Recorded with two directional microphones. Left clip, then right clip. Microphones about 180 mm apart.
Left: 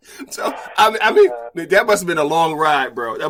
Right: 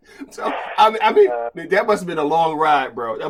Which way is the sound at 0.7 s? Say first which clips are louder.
Left 1 dB; 5° left (ahead or behind).